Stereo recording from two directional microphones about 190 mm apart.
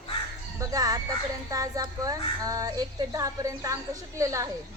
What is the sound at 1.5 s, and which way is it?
A child's voice, 20° right (ahead or behind).